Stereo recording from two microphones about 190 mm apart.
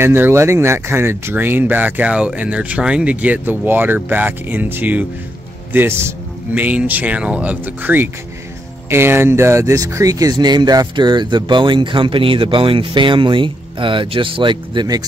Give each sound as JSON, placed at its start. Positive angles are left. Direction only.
{"t": 0.0, "sound": "speech", "side_deg": -10}